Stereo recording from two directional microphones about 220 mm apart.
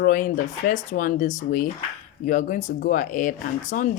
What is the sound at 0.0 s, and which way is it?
Speech, 35° left (ahead or behind).